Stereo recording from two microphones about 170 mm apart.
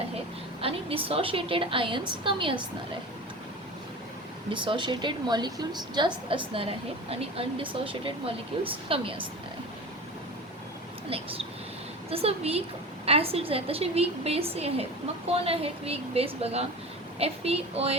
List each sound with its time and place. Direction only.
0.6 s a woman's voice: 35° right (ahead or behind)
4.4 s a woman's voice: 30° right (ahead or behind)
12.1 s a woman's voice: 35° right (ahead or behind)